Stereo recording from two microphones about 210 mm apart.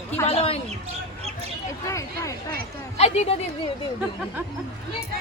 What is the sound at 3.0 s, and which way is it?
Speech, 30° left (ahead or behind).